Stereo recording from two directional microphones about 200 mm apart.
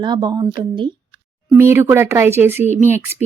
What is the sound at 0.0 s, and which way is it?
A woman's voice, 20° right (ahead or behind).